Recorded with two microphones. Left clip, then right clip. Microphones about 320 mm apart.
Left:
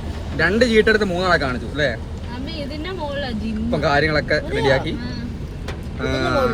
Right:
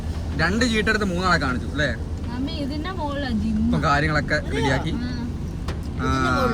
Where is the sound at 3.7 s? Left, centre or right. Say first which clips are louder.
Left 4 dB; centre.